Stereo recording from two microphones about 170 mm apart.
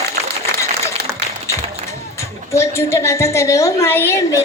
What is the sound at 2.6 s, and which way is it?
A woman's voice, 15° left (ahead or behind).